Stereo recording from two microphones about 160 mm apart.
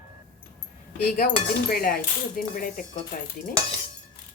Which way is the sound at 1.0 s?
65° left (ahead or behind).